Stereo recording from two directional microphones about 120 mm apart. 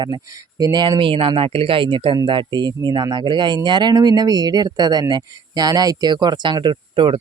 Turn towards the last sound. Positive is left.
turn(degrees=-45)  # may be behind; listen again after turning